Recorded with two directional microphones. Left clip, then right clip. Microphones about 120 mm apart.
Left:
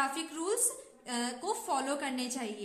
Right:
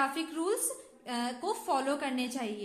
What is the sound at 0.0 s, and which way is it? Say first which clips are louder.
A woman's voice: right 2 dB; 35° right (ahead or behind).